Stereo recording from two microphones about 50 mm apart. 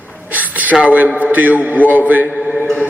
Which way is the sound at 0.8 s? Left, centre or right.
Right.